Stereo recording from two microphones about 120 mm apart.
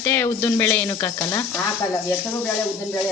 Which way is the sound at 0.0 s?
20° left (ahead or behind).